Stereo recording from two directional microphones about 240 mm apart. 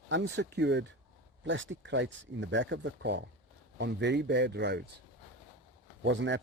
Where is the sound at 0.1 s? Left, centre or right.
Right.